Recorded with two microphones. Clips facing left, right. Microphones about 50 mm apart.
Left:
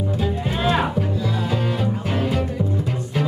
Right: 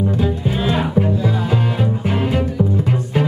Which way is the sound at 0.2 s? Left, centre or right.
Centre.